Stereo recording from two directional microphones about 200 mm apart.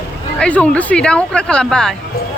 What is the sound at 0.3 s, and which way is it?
Speech, 5° left (ahead or behind).